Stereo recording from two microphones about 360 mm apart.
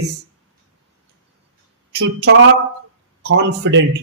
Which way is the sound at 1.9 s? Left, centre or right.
Right.